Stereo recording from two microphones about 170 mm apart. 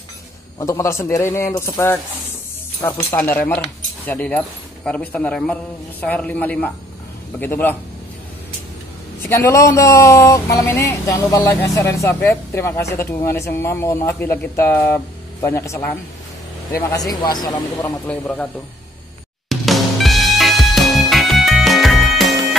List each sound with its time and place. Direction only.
0.6 s speech: 15° left (ahead or behind)
9.2 s speech: 15° left (ahead or behind)
18.0 s speech: 10° left (ahead or behind)
19.5 s music: centre (ahead or behind)